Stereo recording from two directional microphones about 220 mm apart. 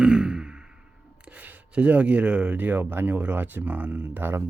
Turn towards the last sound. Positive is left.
turn(degrees=-10)  # may be behind; listen again after turning